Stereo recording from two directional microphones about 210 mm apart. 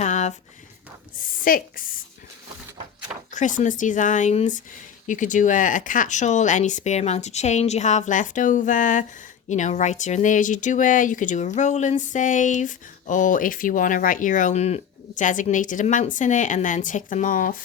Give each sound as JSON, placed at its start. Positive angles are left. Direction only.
{"t": 0.0, "sound": "a sound", "side_deg": 35}
{"t": 1.5, "sound": "speech", "side_deg": 40}
{"t": 3.3, "sound": "speech", "side_deg": 35}